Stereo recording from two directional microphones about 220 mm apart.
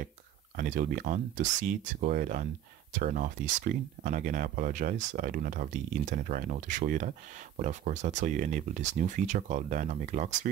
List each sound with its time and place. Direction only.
0.6 s speech: 40° right (ahead or behind)